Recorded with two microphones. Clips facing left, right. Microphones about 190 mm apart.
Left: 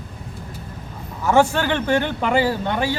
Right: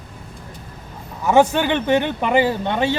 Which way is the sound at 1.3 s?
20° right (ahead or behind).